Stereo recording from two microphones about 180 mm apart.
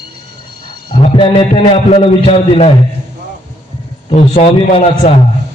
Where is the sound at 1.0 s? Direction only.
30° left (ahead or behind).